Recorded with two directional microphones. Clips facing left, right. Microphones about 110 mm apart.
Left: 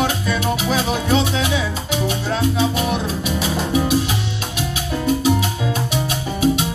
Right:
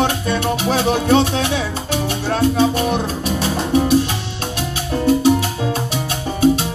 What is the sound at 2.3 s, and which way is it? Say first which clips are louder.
Music: right 5 dB; 40° right (ahead or behind).